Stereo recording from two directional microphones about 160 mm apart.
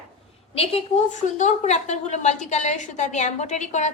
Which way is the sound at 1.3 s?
45° left (ahead or behind).